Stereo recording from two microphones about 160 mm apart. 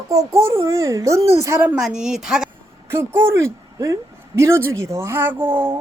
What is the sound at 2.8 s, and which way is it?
A woman's voice, 15° right (ahead or behind).